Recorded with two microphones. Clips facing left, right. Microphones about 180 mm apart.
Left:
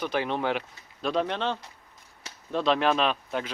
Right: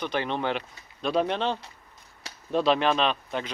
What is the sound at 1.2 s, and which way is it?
Speech, 15° right (ahead or behind).